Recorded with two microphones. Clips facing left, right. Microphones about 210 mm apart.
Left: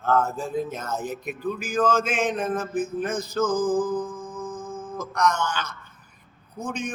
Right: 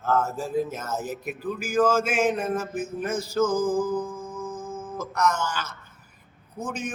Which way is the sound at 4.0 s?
25° right (ahead or behind).